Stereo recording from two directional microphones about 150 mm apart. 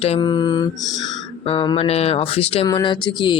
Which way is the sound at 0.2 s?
30° left (ahead or behind).